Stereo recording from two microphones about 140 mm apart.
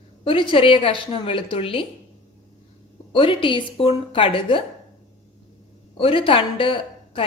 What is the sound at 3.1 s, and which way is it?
A woman's voice, 35° left (ahead or behind).